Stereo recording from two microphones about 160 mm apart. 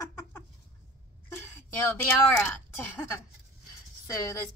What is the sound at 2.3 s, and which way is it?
Speech, 10° left (ahead or behind).